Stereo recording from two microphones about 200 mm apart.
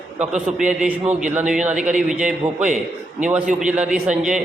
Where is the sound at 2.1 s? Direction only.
5° right (ahead or behind).